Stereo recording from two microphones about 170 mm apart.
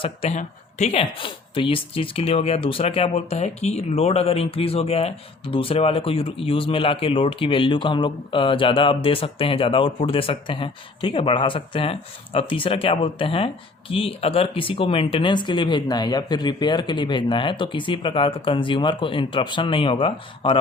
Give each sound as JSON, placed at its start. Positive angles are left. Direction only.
{"t": 0.0, "sound": "speech", "side_deg": 35}